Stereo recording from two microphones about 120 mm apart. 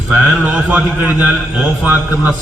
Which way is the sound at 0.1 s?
10° right (ahead or behind).